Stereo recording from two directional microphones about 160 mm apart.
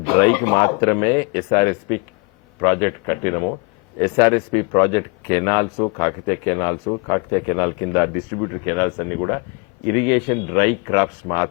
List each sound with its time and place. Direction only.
0.0 s speech: 20° left (ahead or behind)